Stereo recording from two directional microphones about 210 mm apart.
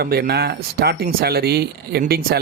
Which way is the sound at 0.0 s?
50° right (ahead or behind).